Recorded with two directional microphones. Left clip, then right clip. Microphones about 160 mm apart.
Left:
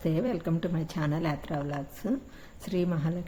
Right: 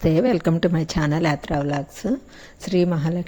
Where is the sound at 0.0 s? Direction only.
40° right (ahead or behind).